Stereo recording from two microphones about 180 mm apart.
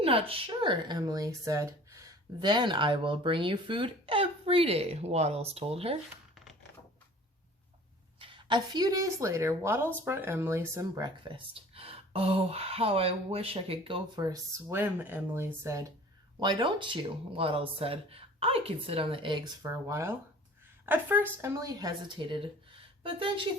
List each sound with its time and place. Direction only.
0.0 s speech: 30° right (ahead or behind)
8.2 s speech: 25° right (ahead or behind)
16.4 s a woman's voice: 25° right (ahead or behind)